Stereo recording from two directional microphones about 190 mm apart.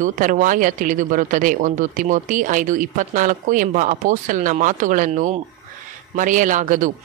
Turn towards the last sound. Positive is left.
turn(degrees=-45)  # may be behind; listen again after turning